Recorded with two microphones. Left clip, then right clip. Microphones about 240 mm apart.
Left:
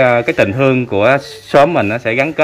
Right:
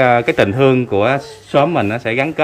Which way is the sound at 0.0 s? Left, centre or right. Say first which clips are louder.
Left 1 dB; centre.